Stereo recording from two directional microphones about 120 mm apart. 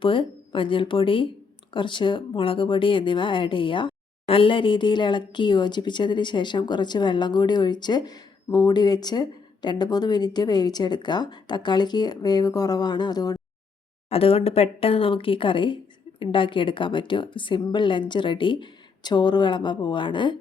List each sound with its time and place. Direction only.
0.0 s speech: 45° left (ahead or behind)
14.1 s speech: 55° left (ahead or behind)